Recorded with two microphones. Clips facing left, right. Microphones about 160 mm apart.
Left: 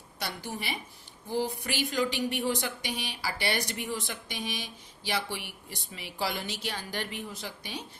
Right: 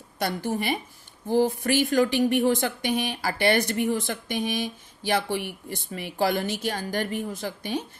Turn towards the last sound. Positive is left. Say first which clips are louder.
# right 9 dB
turn(degrees=-50)  # may be behind; listen again after turning